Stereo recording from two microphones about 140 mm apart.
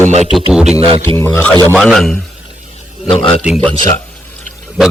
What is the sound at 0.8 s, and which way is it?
Speech, 40° right (ahead or behind).